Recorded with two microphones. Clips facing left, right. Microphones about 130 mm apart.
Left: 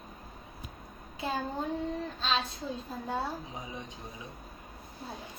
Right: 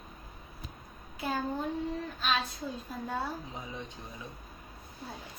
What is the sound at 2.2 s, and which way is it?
A woman's voice, 25° left (ahead or behind).